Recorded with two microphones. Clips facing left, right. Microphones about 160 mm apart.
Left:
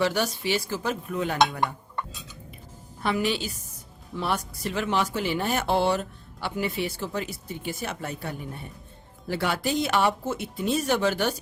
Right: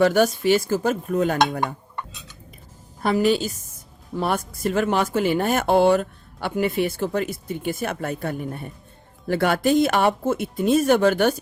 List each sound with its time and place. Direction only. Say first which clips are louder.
0.0 s speech: right 8 dB; 50° right (ahead or behind)
3.0 s speech: right 7 dB; 40° right (ahead or behind)